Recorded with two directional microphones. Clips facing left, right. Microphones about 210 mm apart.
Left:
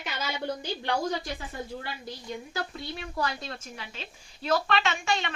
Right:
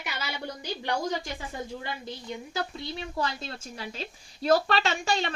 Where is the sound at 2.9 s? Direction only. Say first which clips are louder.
Even; 25° right (ahead or behind).